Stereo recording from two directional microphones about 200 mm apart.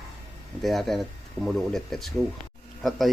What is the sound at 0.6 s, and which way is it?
A man's voice, centre (ahead or behind).